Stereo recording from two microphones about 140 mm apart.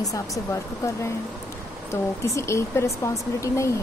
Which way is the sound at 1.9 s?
20° left (ahead or behind).